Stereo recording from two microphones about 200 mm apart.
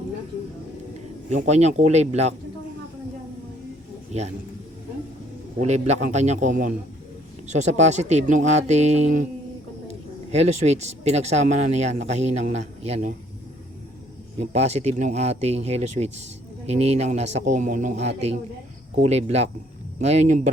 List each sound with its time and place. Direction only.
1.3 s speech: 35° right (ahead or behind)
4.1 s speech: 35° right (ahead or behind)
5.5 s speech: 35° right (ahead or behind)
10.3 s speech: 35° right (ahead or behind)
14.3 s speech: 30° right (ahead or behind)